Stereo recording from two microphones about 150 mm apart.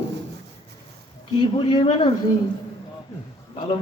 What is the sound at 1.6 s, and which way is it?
Speech, 35° left (ahead or behind).